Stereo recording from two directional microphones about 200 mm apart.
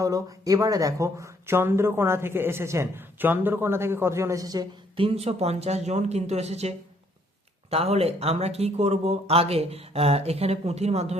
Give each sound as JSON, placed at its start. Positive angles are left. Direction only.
{"t": 0.0, "sound": "speech", "side_deg": -15}